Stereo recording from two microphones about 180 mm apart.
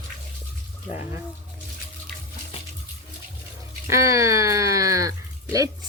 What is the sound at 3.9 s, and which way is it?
A woman's voice, 15° right (ahead or behind).